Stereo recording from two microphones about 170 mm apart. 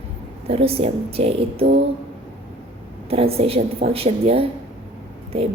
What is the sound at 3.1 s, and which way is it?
A woman's voice, 35° right (ahead or behind).